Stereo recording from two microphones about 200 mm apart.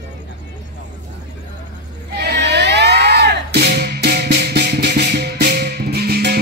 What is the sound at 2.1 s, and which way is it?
Music, 55° right (ahead or behind).